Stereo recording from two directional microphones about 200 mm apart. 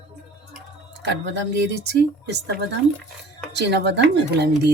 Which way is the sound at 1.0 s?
60° right (ahead or behind).